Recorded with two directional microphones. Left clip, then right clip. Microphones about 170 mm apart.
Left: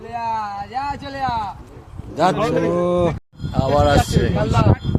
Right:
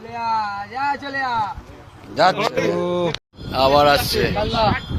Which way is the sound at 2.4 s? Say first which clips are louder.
Left 2 dB; 90° left.